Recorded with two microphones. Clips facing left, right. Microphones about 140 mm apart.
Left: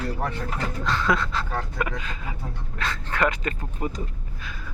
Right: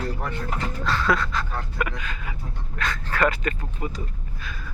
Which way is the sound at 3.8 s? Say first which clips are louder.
Left 2 dB; 40° left (ahead or behind).